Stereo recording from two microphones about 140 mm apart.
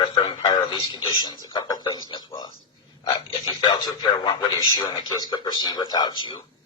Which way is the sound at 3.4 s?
30° left (ahead or behind).